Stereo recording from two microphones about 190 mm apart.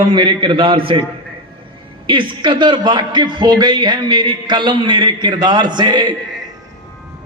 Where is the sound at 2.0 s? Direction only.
25° right (ahead or behind).